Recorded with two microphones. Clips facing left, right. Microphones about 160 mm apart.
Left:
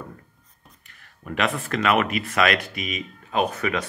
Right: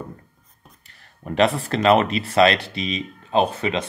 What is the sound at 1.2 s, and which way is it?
Speech, 30° right (ahead or behind).